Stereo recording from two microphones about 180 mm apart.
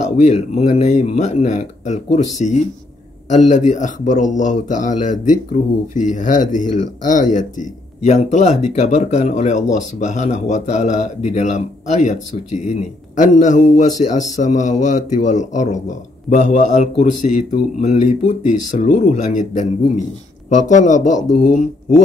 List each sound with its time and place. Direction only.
0.2 s speech: 35° left (ahead or behind)